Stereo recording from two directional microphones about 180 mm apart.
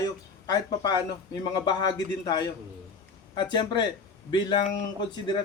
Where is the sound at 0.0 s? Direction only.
20° left (ahead or behind).